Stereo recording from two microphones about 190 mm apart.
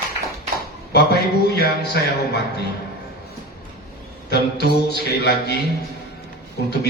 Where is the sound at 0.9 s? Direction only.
60° left (ahead or behind).